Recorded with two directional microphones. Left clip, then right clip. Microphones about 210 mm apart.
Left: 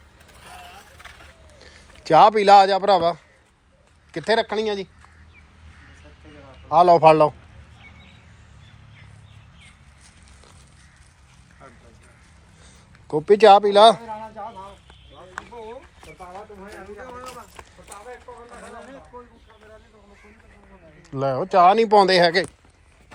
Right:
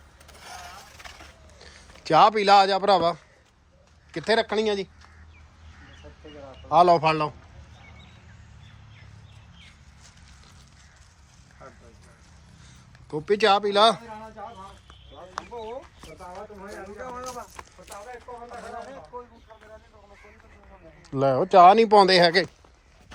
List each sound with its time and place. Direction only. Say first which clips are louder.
1.6 s a man's voice: left 4 dB; 15° right (ahead or behind)
6.7 s speech: left 3 dB; 20° right (ahead or behind)
7.0 s a man's voice: left 10 dB; 5° right (ahead or behind)
13.1 s a man's voice: left 8 dB; 5° right (ahead or behind)
15.4 s a sound: even; centre (ahead or behind)
21.1 s speech: right 2 dB; 30° right (ahead or behind)